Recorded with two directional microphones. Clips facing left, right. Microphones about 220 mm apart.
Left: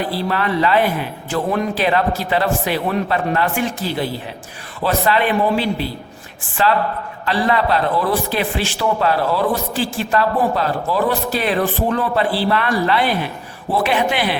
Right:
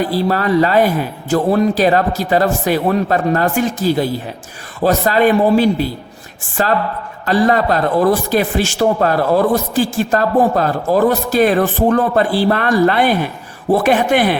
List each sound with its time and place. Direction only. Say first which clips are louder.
0.0 s a man's voice: right 5 dB; 40° right (ahead or behind)